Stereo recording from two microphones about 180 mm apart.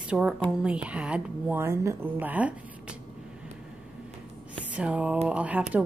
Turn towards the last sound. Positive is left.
turn(degrees=-10)  # may be behind; listen again after turning